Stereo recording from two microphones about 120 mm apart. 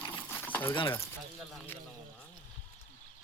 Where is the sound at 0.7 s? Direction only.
45° left (ahead or behind).